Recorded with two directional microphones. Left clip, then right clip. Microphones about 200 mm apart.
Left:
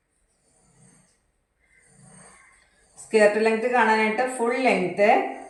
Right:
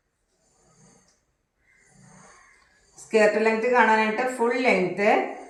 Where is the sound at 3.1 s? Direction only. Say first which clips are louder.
Left 1 dB; 10° left (ahead or behind).